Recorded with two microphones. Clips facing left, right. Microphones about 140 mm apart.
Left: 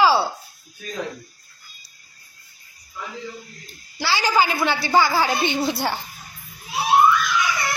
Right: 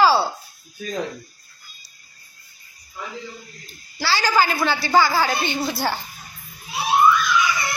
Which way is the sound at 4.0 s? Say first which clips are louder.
Even; 15° left (ahead or behind).